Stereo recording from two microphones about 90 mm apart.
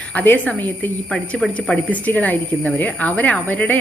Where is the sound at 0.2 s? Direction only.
15° left (ahead or behind).